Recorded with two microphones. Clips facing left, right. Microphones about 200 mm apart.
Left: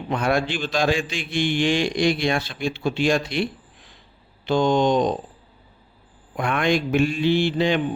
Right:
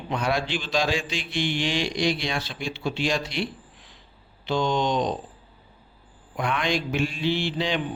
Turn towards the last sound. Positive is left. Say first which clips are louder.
# left 6 dB
turn(degrees=50)  # may be behind; listen again after turning